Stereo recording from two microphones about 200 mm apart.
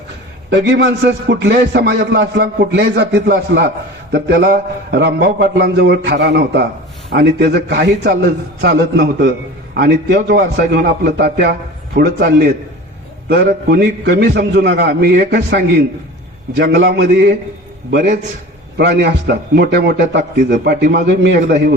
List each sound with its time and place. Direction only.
0.5 s speech: 65° right (ahead or behind)
18.8 s speech: 55° right (ahead or behind)